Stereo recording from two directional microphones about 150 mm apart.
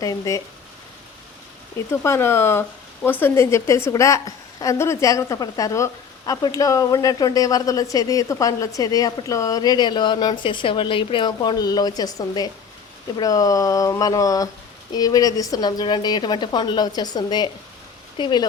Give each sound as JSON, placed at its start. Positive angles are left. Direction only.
{"t": 0.0, "sound": "speech", "side_deg": 25}
{"t": 1.9, "sound": "speech", "side_deg": 20}